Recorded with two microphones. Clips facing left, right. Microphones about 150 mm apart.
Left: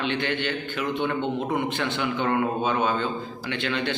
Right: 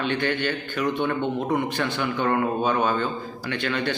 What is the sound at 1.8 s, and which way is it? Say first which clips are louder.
Speech: right 1 dB; 20° left (ahead or behind).